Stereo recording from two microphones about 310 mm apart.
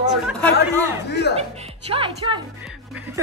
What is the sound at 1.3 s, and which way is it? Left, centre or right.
A woman's voice, centre.